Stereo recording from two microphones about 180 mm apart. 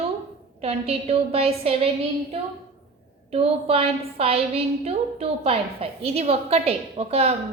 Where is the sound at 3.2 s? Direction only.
35° right (ahead or behind).